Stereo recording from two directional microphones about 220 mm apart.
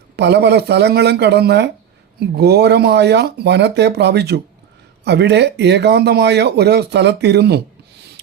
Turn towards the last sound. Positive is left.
turn(degrees=-50)  # may be behind; listen again after turning